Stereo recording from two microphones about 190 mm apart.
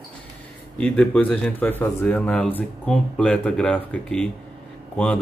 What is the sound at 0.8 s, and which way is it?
Speech, 5° left (ahead or behind).